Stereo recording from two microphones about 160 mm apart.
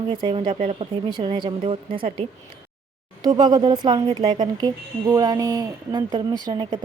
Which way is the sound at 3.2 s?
25° right (ahead or behind).